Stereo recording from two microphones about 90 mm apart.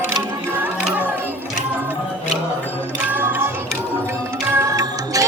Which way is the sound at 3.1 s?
20° right (ahead or behind).